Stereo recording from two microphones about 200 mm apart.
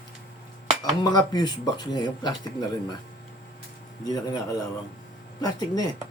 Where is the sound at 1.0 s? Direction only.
20° left (ahead or behind).